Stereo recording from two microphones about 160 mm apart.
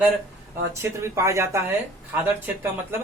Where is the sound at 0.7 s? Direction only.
15° right (ahead or behind).